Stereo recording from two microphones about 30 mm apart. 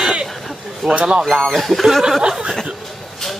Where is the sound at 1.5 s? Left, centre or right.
Centre.